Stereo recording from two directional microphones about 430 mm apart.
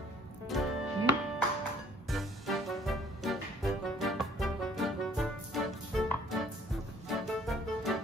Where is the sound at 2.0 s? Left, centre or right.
Centre.